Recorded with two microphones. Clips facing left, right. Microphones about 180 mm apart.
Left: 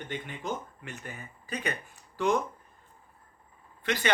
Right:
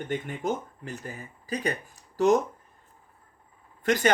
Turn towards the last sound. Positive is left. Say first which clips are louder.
# right 7 dB
turn(degrees=-45)  # may be behind; listen again after turning